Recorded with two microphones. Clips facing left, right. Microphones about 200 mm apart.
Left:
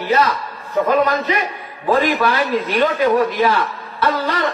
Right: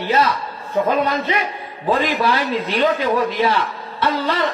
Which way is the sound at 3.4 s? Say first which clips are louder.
Left 2 dB; 30° right (ahead or behind).